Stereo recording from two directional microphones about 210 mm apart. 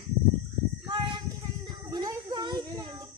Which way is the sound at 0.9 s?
20° right (ahead or behind).